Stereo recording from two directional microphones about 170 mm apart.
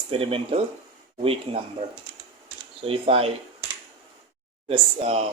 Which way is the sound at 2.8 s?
35° right (ahead or behind).